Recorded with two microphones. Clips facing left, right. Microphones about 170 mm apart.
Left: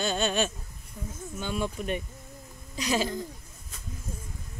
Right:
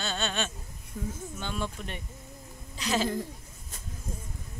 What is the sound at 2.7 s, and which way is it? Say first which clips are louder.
Speech: left 2 dB; 15° left (ahead or behind).